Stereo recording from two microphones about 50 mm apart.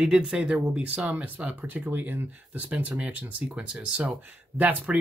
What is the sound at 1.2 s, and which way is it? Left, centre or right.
Speech, right.